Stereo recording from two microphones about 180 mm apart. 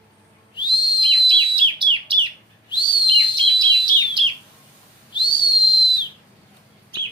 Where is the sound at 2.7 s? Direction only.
25° left (ahead or behind).